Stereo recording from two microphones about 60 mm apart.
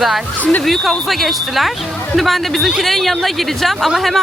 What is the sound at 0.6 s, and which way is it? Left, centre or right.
A woman's voice, centre.